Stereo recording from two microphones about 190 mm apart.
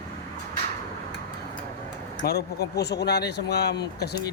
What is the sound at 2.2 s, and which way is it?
Speech, 55° left (ahead or behind).